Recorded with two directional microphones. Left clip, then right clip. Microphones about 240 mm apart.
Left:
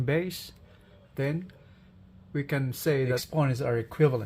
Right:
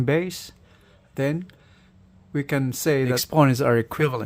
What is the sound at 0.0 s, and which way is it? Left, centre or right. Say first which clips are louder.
Speech: right 6 dB; right.